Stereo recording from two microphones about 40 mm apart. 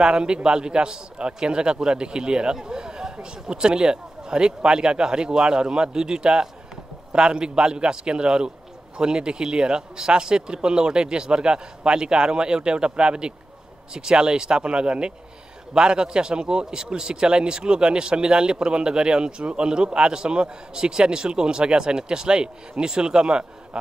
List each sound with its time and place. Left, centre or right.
0.0 s a man's voice: right